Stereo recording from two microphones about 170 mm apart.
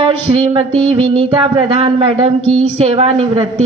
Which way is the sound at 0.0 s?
30° right (ahead or behind).